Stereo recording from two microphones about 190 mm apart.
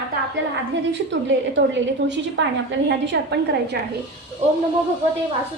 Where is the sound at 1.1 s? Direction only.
70° right (ahead or behind).